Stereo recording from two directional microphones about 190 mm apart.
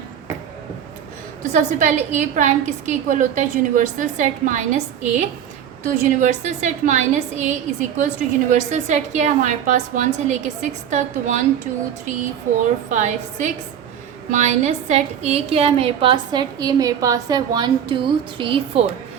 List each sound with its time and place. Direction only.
1.5 s a woman's voice: 40° right (ahead or behind)
12.9 s a woman's voice: 40° right (ahead or behind)